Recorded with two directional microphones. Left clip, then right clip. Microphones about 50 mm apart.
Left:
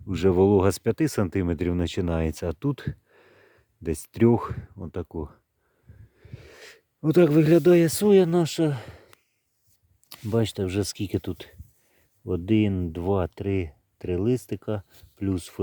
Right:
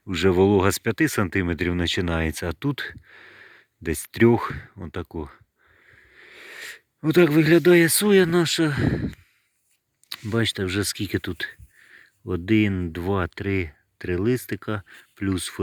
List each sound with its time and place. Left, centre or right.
0.1 s speech: left
6.1 s wheeze: centre
6.6 s speech: left; by 8.0 s centre
8.0 s speech: centre
10.1 s speech: centre